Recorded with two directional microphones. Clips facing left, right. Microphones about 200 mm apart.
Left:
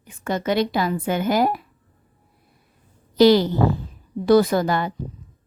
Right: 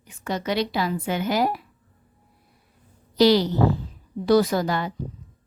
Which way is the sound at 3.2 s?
50° left (ahead or behind).